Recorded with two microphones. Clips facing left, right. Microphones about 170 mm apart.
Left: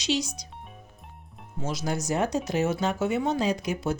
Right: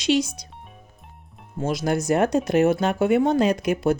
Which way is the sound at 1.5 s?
55° right (ahead or behind).